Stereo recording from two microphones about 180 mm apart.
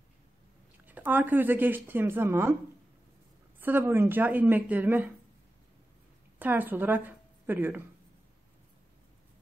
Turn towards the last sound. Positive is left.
turn(degrees=-10)  # may be behind; listen again after turning